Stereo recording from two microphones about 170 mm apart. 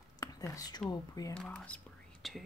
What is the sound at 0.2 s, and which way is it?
Speech, 20° left (ahead or behind).